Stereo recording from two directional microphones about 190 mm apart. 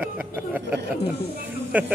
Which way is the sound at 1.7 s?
10° right (ahead or behind).